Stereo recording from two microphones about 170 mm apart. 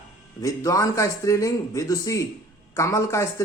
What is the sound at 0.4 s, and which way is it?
Speech, 20° left (ahead or behind).